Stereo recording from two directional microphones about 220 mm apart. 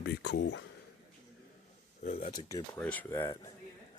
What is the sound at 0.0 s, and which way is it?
Speech, 50° left (ahead or behind).